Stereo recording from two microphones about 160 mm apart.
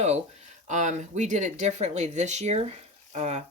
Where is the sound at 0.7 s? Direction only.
50° right (ahead or behind).